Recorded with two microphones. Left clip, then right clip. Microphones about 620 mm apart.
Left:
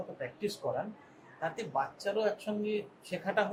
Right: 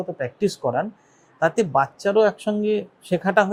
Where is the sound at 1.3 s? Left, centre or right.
Right.